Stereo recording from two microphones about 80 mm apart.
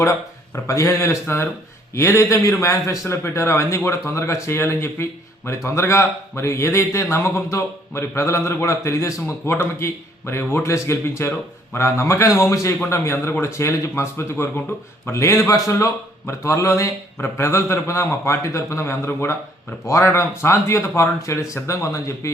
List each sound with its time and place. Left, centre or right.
0.0 s a man's voice: left